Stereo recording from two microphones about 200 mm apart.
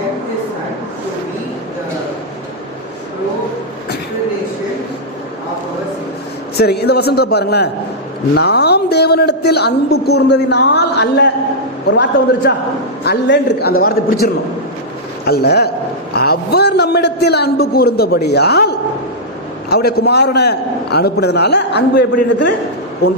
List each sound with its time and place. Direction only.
6.6 s a man's voice: 55° left (ahead or behind)
15.3 s a man's voice: 50° left (ahead or behind)
19.7 s a man's voice: 50° left (ahead or behind)